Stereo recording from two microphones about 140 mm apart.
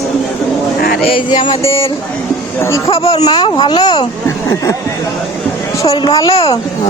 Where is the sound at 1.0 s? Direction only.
35° left (ahead or behind).